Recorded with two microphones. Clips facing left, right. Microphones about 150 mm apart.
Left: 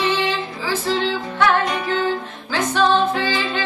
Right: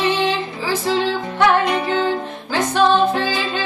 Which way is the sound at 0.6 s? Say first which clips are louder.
Right 2 dB; 15° right (ahead or behind).